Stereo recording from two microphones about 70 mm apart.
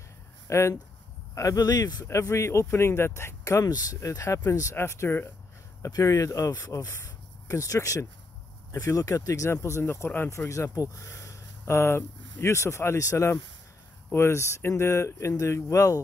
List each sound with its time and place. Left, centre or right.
0.5 s speech: left
1.3 s speech: left
2.0 s speech: left
5.8 s speech: left
10.5 s speech: left